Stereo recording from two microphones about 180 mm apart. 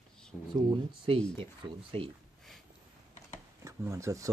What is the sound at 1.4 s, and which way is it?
Speech, 30° right (ahead or behind).